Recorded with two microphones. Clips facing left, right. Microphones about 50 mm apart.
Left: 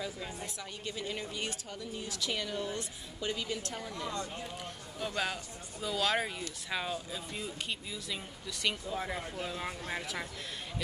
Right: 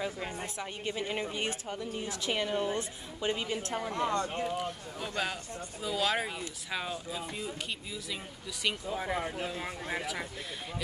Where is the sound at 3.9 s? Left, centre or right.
Right.